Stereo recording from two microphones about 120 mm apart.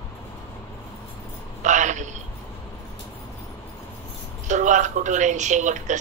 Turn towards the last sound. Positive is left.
turn(degrees=-90)